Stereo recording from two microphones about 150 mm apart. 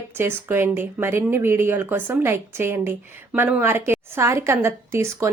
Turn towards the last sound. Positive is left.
turn(degrees=-20)  # may be behind; listen again after turning